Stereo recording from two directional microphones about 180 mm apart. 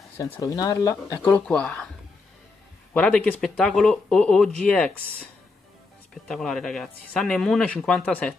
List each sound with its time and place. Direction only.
0.2 s speech: 20° left (ahead or behind)
2.9 s speech: 10° left (ahead or behind)